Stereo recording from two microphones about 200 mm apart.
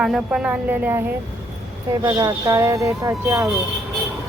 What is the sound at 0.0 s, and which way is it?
Speech, 5° right (ahead or behind).